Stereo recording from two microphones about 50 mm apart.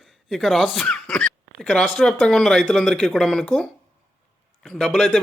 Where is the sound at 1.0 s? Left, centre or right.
Left.